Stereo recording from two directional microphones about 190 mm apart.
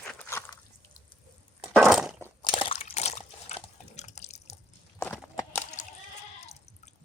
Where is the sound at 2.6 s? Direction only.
30° left (ahead or behind).